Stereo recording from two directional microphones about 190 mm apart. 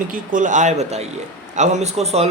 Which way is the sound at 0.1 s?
45° right (ahead or behind).